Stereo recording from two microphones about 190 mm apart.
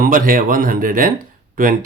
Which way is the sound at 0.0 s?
45° right (ahead or behind).